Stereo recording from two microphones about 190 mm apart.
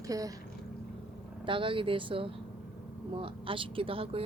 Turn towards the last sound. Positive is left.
turn(degrees=-30)  # may be behind; listen again after turning